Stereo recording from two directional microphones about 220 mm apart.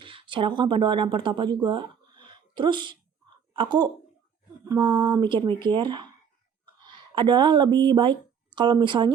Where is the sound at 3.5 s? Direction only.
20° right (ahead or behind).